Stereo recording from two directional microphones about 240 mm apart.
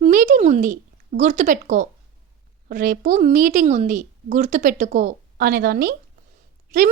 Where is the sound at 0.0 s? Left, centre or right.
Right.